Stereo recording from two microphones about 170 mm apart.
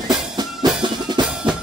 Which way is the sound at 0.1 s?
25° right (ahead or behind).